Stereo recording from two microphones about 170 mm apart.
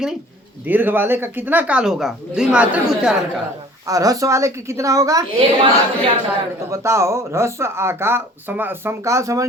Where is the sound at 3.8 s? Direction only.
20° right (ahead or behind).